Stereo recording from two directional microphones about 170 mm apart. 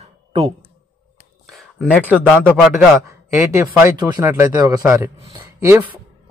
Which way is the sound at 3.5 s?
15° right (ahead or behind).